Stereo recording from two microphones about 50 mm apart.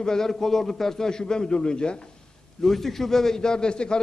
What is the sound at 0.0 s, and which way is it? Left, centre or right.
A man's voice, centre.